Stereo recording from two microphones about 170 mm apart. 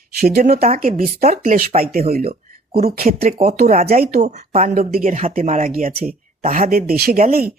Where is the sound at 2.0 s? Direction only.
40° right (ahead or behind).